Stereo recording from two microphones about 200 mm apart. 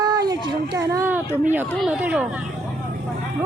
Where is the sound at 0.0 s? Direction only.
20° right (ahead or behind).